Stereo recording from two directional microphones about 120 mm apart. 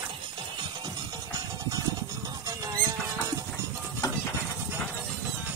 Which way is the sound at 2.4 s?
30° right (ahead or behind).